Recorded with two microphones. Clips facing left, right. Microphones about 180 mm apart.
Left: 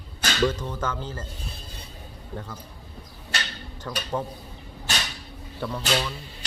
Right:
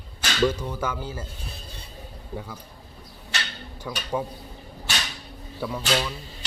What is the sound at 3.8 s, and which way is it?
Speech, 10° right (ahead or behind).